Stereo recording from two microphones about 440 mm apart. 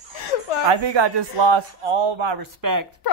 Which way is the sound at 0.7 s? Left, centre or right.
Right.